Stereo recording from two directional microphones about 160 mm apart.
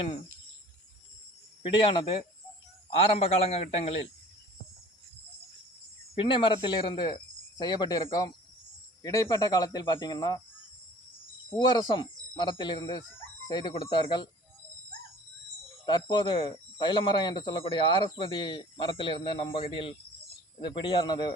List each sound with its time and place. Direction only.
1.6 s a man's voice: 35° left (ahead or behind)
6.1 s speech: 30° left (ahead or behind)
11.5 s speech: 25° left (ahead or behind)
15.9 s speech: 30° left (ahead or behind)